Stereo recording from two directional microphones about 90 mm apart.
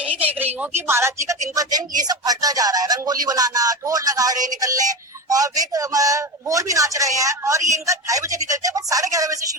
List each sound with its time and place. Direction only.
0.0 s a man's voice: 15° right (ahead or behind); by 9.4 s 40° right (ahead or behind)